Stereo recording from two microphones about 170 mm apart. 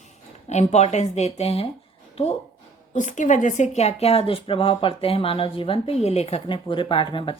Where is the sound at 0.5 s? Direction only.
40° left (ahead or behind).